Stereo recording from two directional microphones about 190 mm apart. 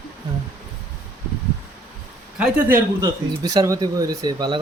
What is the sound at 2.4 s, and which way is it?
Speech, 10° right (ahead or behind).